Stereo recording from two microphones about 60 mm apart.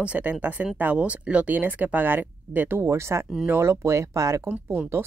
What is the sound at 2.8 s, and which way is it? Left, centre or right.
Speech, right.